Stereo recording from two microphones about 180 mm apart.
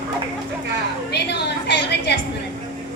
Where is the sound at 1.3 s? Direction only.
70° left (ahead or behind).